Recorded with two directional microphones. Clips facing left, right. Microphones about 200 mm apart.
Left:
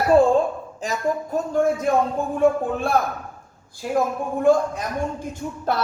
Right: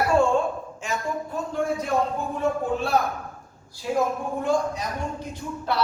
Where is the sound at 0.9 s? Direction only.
45° left (ahead or behind).